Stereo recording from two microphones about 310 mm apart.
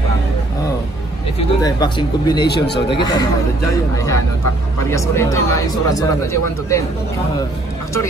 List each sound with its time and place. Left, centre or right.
1.6 s speech: centre
2.4 s speech: left
3.0 s speech: centre